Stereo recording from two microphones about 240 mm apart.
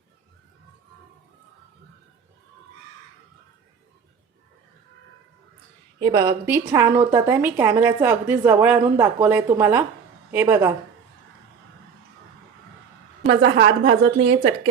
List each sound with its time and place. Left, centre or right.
6.0 s a woman's voice: centre
13.2 s a woman's voice: right